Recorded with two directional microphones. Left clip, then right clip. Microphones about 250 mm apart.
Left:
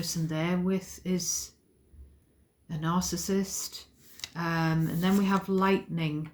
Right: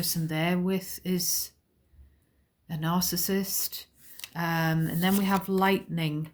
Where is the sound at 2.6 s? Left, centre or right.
Right.